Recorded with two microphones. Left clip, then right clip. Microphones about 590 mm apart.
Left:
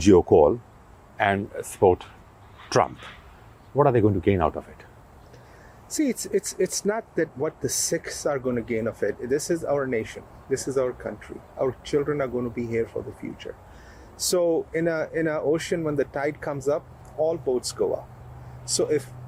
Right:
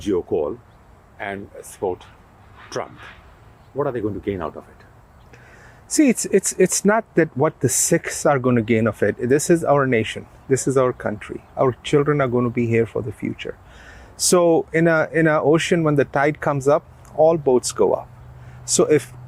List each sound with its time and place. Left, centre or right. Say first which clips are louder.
0.0 s speech: left 6 dB; left
1.8 s speech: left 6 dB; left
5.9 s speech: right 8 dB; right
14.2 s speech: right 7 dB; right